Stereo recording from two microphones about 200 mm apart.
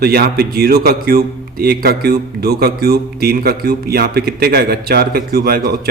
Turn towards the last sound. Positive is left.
turn(degrees=-50)  # may be behind; listen again after turning